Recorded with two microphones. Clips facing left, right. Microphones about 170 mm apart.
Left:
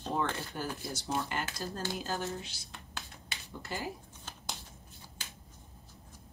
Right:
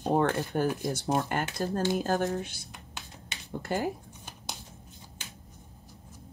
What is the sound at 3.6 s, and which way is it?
Speech, 50° right (ahead or behind).